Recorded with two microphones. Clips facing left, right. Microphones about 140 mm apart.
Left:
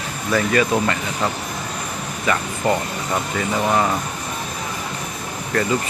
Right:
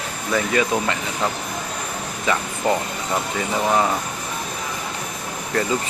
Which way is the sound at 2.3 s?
20° right (ahead or behind).